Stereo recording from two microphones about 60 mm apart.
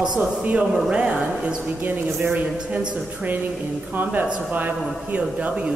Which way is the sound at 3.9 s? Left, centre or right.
Right.